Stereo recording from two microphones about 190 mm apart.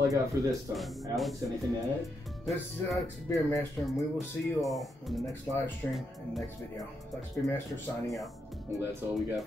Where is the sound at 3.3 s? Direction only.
15° left (ahead or behind).